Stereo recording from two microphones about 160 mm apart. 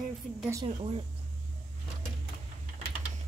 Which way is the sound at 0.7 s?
40° right (ahead or behind).